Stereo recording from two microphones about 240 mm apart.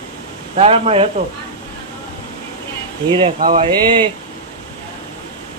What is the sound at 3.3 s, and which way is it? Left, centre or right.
Speech, right.